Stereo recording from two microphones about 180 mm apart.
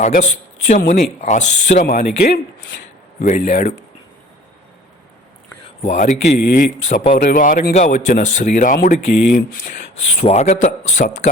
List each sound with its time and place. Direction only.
0.0 s speech: 40° left (ahead or behind)
3.2 s speech: 40° left (ahead or behind)
3.4 s speech: 55° left (ahead or behind)
5.8 s speech: 45° left (ahead or behind)
10.2 s a man's voice: 40° left (ahead or behind)